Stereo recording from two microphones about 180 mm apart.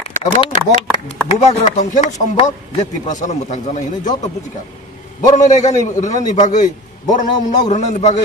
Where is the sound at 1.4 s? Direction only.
40° left (ahead or behind).